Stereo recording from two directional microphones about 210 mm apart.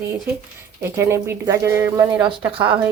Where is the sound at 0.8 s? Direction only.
10° right (ahead or behind).